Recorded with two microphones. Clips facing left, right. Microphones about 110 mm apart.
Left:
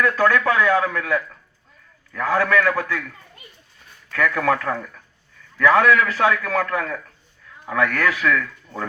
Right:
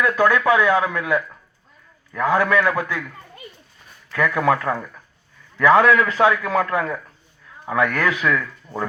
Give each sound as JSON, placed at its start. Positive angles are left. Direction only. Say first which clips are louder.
{"t": 0.0, "sound": "a man's voice", "louder": "right 1 dB", "side_deg": -15}
{"t": 4.1, "sound": "a man's voice", "louder": "right 1 dB", "side_deg": -20}